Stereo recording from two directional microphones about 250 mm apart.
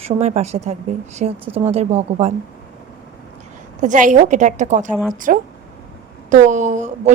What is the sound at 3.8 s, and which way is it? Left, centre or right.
A woman's voice, right.